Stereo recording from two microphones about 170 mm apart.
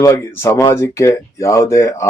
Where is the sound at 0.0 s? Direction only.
15° left (ahead or behind).